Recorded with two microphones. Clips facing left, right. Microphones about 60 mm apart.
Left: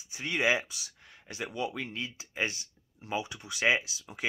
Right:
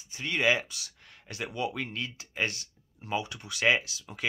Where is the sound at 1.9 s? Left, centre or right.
Centre.